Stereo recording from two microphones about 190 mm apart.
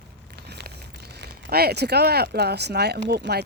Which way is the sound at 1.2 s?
55° right (ahead or behind).